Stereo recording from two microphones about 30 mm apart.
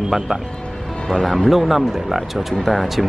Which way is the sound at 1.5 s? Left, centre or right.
Centre.